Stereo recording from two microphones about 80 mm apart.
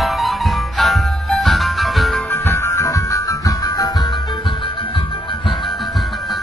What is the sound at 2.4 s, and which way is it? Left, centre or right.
Music, left.